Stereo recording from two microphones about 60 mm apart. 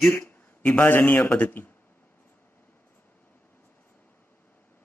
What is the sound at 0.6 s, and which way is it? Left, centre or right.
A man's voice, left.